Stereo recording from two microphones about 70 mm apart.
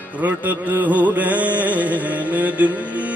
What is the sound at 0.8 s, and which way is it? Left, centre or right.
Music, right.